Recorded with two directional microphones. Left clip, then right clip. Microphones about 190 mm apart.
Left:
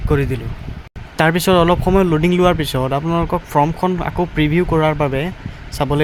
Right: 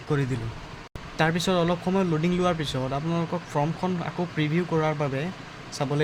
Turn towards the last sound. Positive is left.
turn(degrees=40)  # may be behind; listen again after turning